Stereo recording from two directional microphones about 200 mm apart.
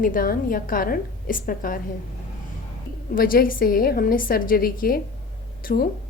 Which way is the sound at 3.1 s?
45° left (ahead or behind).